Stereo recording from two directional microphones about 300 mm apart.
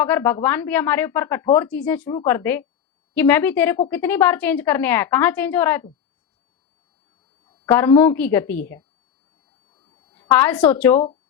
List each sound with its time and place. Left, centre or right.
0.0 s a woman's voice: centre
7.4 s a woman's voice: centre
9.7 s a sound: centre
10.2 s a woman's voice: centre